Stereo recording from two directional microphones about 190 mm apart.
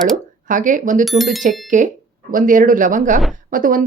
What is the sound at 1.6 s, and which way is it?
Speech, 40° right (ahead or behind).